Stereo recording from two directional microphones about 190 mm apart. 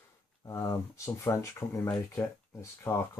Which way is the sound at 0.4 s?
15° left (ahead or behind).